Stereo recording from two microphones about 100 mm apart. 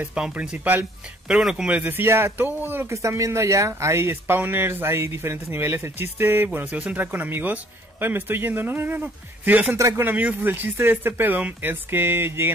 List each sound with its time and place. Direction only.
0.0 s speech: 10° right (ahead or behind)
3.0 s speech: 30° right (ahead or behind)
9.8 s speech: 30° right (ahead or behind)
10.0 s speech: 20° right (ahead or behind)